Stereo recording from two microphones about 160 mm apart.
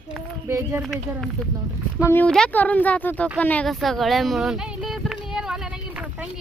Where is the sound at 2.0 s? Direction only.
15° left (ahead or behind).